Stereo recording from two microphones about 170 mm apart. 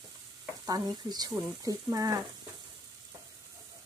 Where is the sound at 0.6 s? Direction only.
20° right (ahead or behind).